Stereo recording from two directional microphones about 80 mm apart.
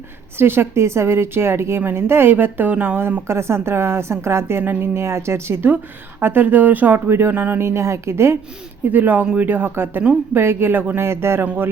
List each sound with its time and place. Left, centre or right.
0.3 s speech: right
3.2 s speech: right
4.6 s speech: right
4.9 s speech: right
7.6 s speech: right
8.9 s speech: right